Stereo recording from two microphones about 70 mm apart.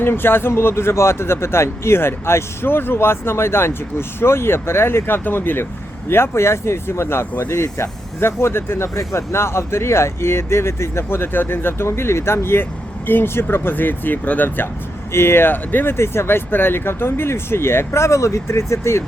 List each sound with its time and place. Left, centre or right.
0.0 s speech: left